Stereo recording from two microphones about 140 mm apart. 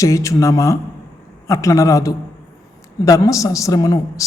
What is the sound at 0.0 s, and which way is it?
A man's voice, 20° left (ahead or behind).